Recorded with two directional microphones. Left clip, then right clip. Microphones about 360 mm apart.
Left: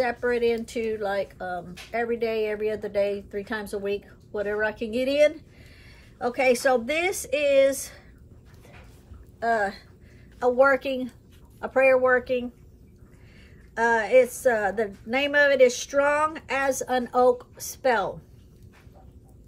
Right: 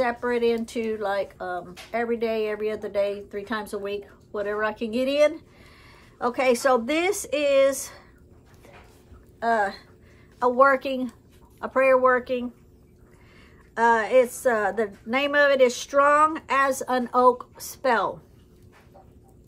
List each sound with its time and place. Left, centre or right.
0.0 s speech: centre
9.4 s speech: centre
13.7 s speech: centre